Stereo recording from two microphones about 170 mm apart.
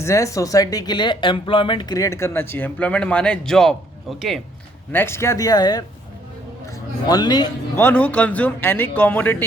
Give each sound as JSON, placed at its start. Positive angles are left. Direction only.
{"t": 0.0, "sound": "speech", "side_deg": 20}
{"t": 4.9, "sound": "speech", "side_deg": 15}
{"t": 7.1, "sound": "a man's voice", "side_deg": 25}
{"t": 7.8, "sound": "speech", "side_deg": 10}